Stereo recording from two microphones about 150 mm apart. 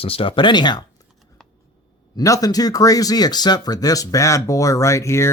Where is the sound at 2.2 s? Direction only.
25° left (ahead or behind).